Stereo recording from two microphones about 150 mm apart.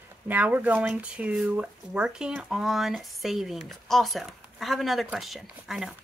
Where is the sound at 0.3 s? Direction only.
10° right (ahead or behind).